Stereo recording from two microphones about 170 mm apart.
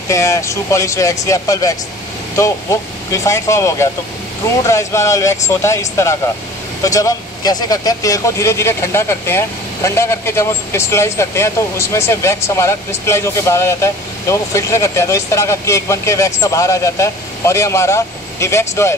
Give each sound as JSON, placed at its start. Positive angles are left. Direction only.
{"t": 0.1, "sound": "speech", "side_deg": 15}